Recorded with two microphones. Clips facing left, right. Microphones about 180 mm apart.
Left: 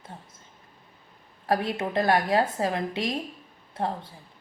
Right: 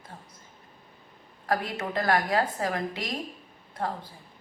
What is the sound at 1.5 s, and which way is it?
A woman's voice, 25° left (ahead or behind).